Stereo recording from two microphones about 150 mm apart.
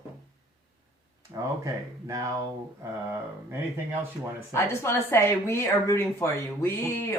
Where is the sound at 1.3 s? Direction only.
25° right (ahead or behind).